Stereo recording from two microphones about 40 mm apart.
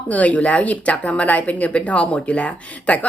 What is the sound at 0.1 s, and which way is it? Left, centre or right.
A woman's voice, left.